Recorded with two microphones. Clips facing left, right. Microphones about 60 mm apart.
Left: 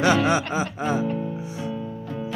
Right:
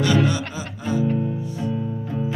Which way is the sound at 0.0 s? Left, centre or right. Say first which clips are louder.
Left 1 dB; left.